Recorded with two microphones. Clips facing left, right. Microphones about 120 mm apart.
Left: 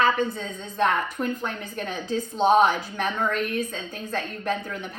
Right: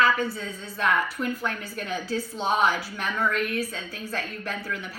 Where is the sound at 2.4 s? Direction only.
45° left (ahead or behind).